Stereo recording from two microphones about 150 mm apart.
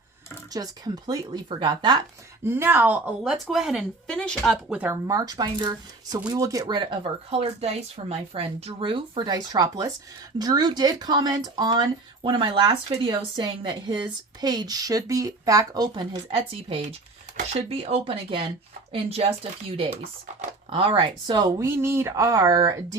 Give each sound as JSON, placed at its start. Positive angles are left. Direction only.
{"t": 0.5, "sound": "speech", "side_deg": -25}
{"t": 2.4, "sound": "speech", "side_deg": -15}
{"t": 3.3, "sound": "speech", "side_deg": 0}
{"t": 5.0, "sound": "speech", "side_deg": -25}